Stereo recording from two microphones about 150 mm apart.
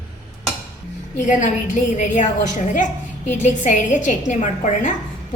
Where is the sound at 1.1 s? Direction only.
55° left (ahead or behind).